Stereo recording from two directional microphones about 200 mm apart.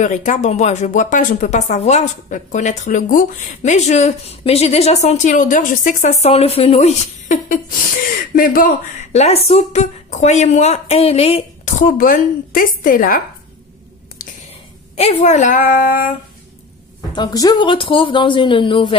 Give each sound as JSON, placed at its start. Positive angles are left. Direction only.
{"t": 0.0, "sound": "speech", "side_deg": 40}
{"t": 15.0, "sound": "speech", "side_deg": 35}
{"t": 17.1, "sound": "speech", "side_deg": 20}